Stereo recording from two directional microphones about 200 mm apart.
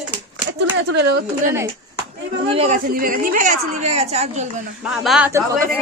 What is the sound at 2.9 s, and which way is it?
A woman's voice, 45° right (ahead or behind).